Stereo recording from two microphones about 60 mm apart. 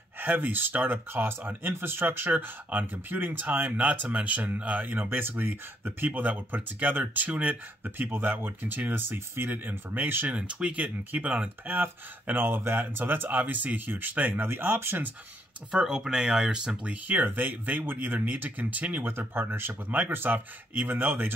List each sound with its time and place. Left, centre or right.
0.2 s speech: right
10.3 s speech: centre
11.7 s speech: right
15.7 s speech: centre
17.1 s speech: right
19.0 s speech: right